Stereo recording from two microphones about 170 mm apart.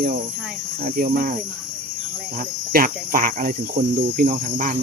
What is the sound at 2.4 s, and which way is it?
Cricket, 60° right (ahead or behind).